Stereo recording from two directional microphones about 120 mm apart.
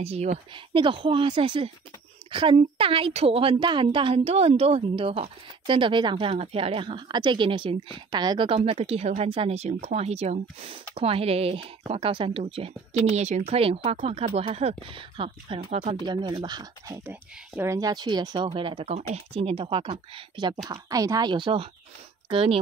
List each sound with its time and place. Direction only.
0.0 s speech: 60° right (ahead or behind)
0.7 s a woman's voice: 45° right (ahead or behind)
8.5 s a woman's voice: 50° right (ahead or behind)
8.7 s a woman's voice: 60° right (ahead or behind)
16.1 s speech: 40° right (ahead or behind)
16.9 s a woman's voice: 15° right (ahead or behind); by 18.9 s 45° right (ahead or behind)
18.9 s a woman's voice: 55° right (ahead or behind)
20.6 s a woman's voice: 30° right (ahead or behind); by 22.6 s 50° right (ahead or behind)